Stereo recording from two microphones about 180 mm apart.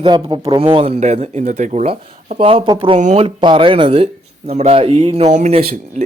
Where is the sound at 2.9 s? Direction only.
40° right (ahead or behind).